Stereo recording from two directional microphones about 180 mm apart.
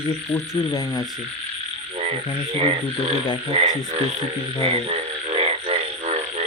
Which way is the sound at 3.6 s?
35° right (ahead or behind).